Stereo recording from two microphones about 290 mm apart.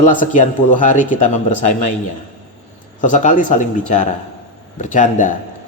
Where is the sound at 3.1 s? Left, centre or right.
Left.